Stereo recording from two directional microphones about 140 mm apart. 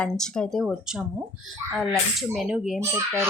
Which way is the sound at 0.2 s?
5° left (ahead or behind).